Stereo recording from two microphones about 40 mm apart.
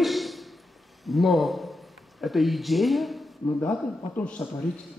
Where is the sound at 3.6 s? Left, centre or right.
Left.